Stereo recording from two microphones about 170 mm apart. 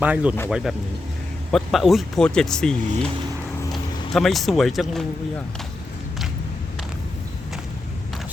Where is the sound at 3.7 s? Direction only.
Centre (ahead or behind).